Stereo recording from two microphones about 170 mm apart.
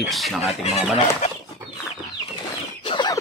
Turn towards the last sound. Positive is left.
turn(degrees=25)  # may be behind; listen again after turning